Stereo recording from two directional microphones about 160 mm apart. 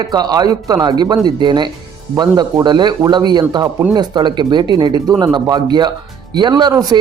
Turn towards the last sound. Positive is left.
turn(degrees=-25)  # may be behind; listen again after turning